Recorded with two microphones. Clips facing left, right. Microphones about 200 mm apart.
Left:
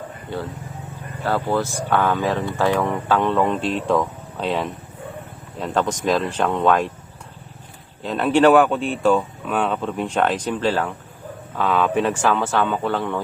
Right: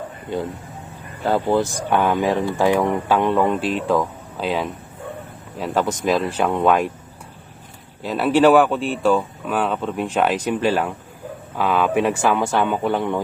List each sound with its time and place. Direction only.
0.3 s speech: 15° right (ahead or behind)
8.0 s speech: 5° right (ahead or behind)